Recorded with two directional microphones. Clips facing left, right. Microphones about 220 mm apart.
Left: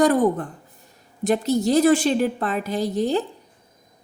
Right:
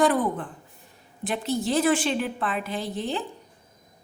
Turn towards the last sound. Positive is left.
turn(degrees=40)  # may be behind; listen again after turning